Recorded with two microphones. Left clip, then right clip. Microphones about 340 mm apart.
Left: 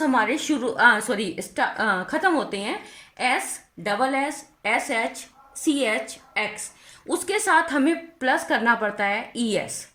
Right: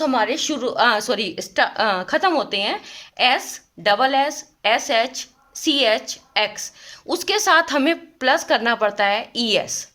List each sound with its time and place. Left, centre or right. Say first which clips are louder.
0.0 s a woman's voice: right 2 dB; right